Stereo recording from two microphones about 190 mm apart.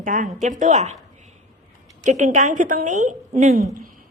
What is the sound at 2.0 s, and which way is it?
A woman's voice, 40° right (ahead or behind).